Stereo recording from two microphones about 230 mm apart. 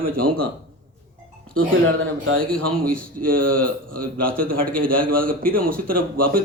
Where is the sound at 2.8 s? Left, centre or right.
Right.